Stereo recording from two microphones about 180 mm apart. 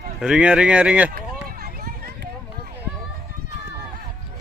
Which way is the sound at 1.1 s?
55° right (ahead or behind).